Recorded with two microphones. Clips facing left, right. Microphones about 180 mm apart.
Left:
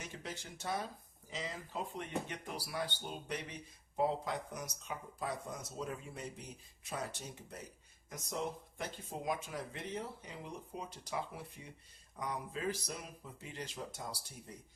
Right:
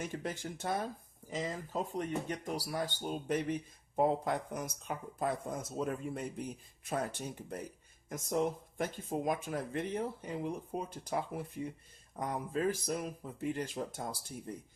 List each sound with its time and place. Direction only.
0.0 s speech: 50° right (ahead or behind)